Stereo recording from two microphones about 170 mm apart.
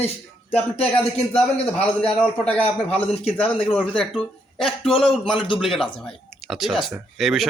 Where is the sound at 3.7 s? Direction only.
5° left (ahead or behind).